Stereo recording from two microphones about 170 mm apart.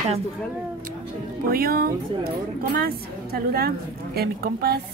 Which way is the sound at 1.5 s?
60° right (ahead or behind).